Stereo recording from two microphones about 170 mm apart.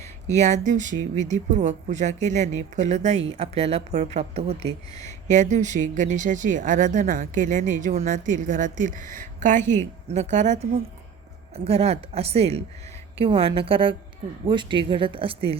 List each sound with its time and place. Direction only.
0.3 s speech: 45° right (ahead or behind)